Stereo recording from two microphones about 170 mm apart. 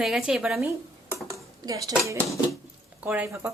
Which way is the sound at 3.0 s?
10° right (ahead or behind).